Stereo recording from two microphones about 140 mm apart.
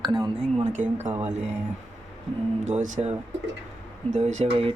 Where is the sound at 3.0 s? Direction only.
45° right (ahead or behind).